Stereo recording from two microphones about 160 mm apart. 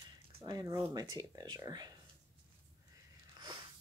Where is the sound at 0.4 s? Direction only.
25° right (ahead or behind).